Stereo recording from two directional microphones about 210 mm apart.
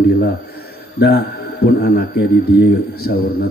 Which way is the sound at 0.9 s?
50° left (ahead or behind).